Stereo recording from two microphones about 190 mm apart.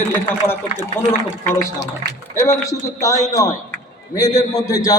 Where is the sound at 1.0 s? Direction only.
10° left (ahead or behind).